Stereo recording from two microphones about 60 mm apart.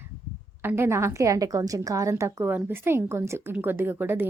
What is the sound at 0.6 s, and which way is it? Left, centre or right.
A woman's voice, right.